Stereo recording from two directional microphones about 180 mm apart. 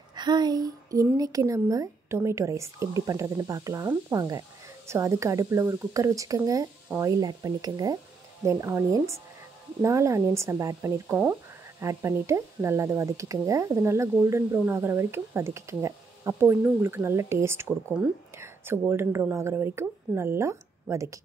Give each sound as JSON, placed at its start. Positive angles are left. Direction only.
{"t": 0.1, "sound": "speech", "side_deg": -25}